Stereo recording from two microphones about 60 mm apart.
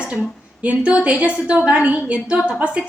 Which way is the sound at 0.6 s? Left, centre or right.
Right.